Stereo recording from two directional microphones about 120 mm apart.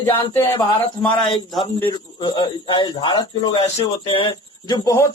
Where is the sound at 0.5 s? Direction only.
45° left (ahead or behind).